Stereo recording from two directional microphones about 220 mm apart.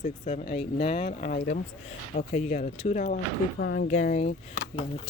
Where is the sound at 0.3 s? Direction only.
30° left (ahead or behind).